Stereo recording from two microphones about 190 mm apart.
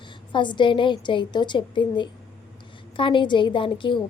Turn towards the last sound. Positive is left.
turn(degrees=25)  # may be behind; listen again after turning